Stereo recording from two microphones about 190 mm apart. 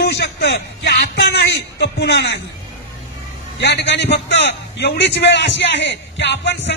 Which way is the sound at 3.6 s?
65° left (ahead or behind).